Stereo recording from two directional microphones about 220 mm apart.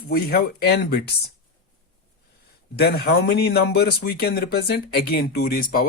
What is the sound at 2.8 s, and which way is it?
Speech, 45° left (ahead or behind).